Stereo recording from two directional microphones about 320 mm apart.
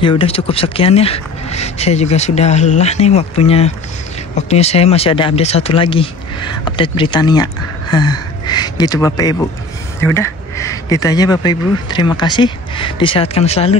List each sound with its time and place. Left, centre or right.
0.2 s speech: centre